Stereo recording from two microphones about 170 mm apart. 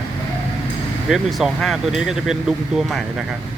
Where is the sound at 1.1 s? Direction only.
Centre (ahead or behind).